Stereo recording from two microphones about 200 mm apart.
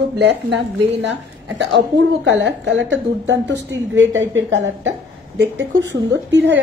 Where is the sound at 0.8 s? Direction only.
60° right (ahead or behind).